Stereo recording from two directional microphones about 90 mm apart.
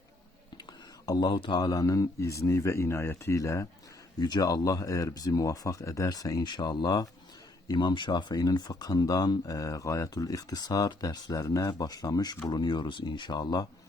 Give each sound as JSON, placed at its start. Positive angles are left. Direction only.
{"t": 1.0, "sound": "speech", "side_deg": 45}
{"t": 1.3, "sound": "speech", "side_deg": 60}
{"t": 4.2, "sound": "speech", "side_deg": 45}
{"t": 6.4, "sound": "speech", "side_deg": 55}